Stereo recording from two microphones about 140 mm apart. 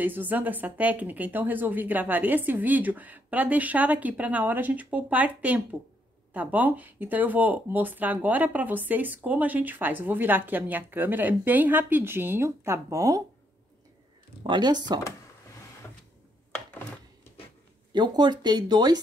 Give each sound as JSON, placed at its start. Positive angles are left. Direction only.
{"t": 0.0, "sound": "speech", "side_deg": -15}
{"t": 14.5, "sound": "speech", "side_deg": -30}
{"t": 17.9, "sound": "speech", "side_deg": -30}